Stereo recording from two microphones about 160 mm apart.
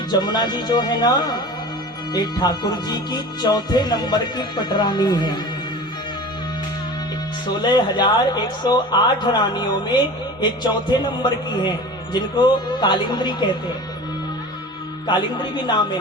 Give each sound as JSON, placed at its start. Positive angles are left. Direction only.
{"t": 0.1, "sound": "speech", "side_deg": 25}
{"t": 7.4, "sound": "speech", "side_deg": 25}
{"t": 15.0, "sound": "speech", "side_deg": 30}